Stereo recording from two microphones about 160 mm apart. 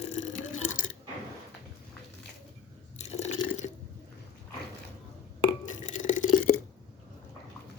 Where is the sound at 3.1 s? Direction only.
45° left (ahead or behind).